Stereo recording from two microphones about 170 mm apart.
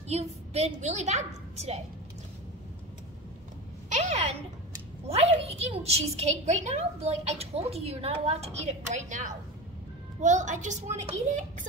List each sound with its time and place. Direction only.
0.1 s a woman's voice: 40° right (ahead or behind)
3.9 s a woman's voice: 40° right (ahead or behind)